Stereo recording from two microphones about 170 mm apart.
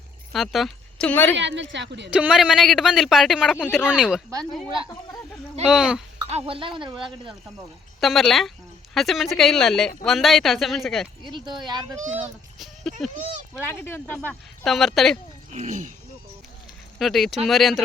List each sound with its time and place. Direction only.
0.3 s speech: centre (ahead or behind)
1.4 s speech: 90° right
2.0 s a woman's voice: 5° right (ahead or behind)
5.6 s a woman's voice: 5° right (ahead or behind)
6.3 s speech: 35° right (ahead or behind)
8.0 s a woman's voice: centre (ahead or behind)
11.3 s speech: 25° right (ahead or behind)
12.1 s a child's voice: centre (ahead or behind)
13.5 s speech: 15° left (ahead or behind)
14.3 s a woman's voice: centre (ahead or behind)
15.5 s speech: 45° right (ahead or behind)
17.0 s a woman's voice: centre (ahead or behind)